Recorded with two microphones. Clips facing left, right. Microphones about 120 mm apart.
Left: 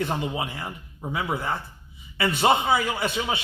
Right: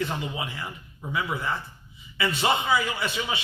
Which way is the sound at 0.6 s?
30° left (ahead or behind).